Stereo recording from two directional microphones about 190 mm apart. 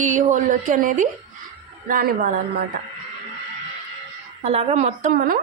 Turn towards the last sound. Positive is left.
turn(degrees=-45)  # may be behind; listen again after turning